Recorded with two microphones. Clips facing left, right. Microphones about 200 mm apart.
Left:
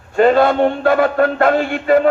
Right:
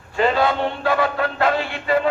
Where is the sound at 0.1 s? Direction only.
50° left (ahead or behind).